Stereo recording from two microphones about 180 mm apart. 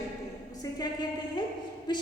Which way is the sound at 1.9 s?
25° left (ahead or behind).